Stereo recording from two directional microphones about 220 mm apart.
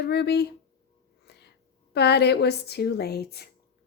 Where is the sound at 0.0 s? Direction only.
50° left (ahead or behind).